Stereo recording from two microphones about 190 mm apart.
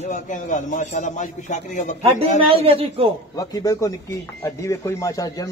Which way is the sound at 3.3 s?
20° left (ahead or behind).